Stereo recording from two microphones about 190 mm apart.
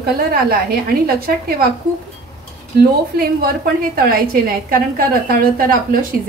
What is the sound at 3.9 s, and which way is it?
A woman's voice, 50° right (ahead or behind).